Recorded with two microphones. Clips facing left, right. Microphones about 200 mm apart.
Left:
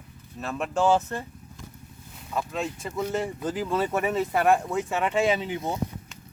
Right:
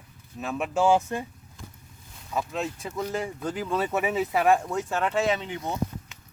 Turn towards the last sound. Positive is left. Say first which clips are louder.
# left 2 dB
turn(degrees=15)  # may be behind; listen again after turning